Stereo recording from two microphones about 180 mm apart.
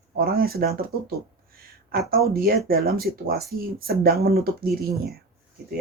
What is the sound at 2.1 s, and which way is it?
Speech, 55° right (ahead or behind).